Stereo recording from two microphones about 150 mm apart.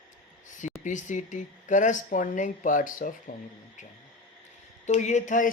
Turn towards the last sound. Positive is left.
turn(degrees=55)  # may be behind; listen again after turning